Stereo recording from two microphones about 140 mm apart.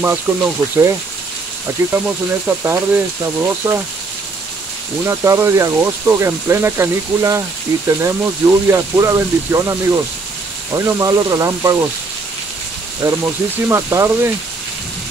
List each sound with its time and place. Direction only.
0.0 s speech: 15° right (ahead or behind)
5.0 s speech: 20° right (ahead or behind)
13.0 s speech: 20° right (ahead or behind)